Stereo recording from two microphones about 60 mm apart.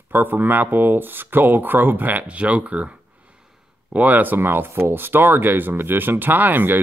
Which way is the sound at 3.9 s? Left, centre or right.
Right.